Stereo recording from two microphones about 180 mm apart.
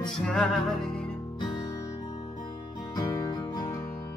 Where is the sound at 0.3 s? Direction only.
5° left (ahead or behind).